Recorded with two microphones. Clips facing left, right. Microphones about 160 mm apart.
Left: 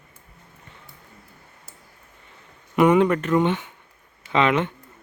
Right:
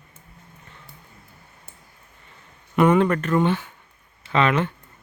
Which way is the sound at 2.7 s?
15° left (ahead or behind).